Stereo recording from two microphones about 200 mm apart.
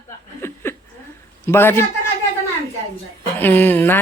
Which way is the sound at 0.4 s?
10° left (ahead or behind).